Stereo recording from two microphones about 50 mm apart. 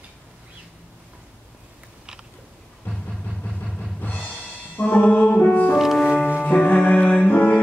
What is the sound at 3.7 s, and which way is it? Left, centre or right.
Music, left.